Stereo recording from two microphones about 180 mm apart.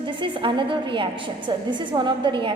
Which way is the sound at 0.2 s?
25° right (ahead or behind).